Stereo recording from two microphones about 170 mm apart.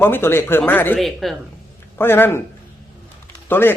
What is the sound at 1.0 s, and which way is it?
Speech, centre (ahead or behind).